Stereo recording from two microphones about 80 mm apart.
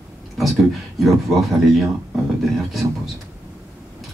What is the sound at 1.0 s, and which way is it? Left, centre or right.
Speech, centre.